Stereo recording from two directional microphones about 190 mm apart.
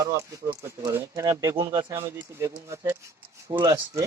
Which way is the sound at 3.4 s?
25° right (ahead or behind).